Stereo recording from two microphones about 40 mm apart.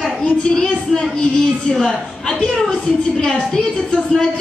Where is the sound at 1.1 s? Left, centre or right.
Centre.